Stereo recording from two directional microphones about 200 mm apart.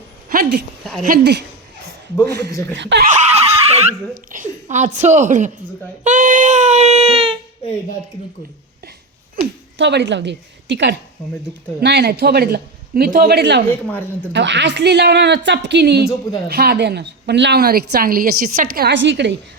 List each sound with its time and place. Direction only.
0.3 s a woman's voice: 45° right (ahead or behind)
2.5 s a woman's voice: 15° left (ahead or behind)
2.7 s a woman's voice: 60° right (ahead or behind)
3.1 s a sound: 35° right (ahead or behind)
4.3 s speech: 40° right (ahead or behind)
6.1 s a sound: 40° right (ahead or behind)
7.6 s speech: 30° left (ahead or behind)
9.3 s a woman's voice: 60° right (ahead or behind)
13.7 s a woman's voice: 10° left (ahead or behind)
14.3 s a woman's voice: 60° right (ahead or behind)